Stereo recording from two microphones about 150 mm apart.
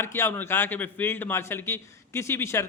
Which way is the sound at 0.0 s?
15° left (ahead or behind).